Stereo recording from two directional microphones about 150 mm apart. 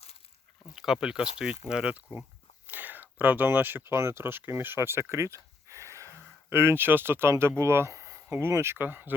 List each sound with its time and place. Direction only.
0.8 s speech: 5° right (ahead or behind)
5.1 s a sound: 20° right (ahead or behind)
6.5 s speech: 15° right (ahead or behind)